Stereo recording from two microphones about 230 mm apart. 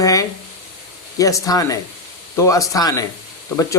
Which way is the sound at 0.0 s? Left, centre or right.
Centre.